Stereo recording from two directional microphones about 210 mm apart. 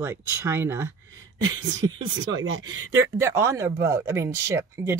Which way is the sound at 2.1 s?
65° right (ahead or behind).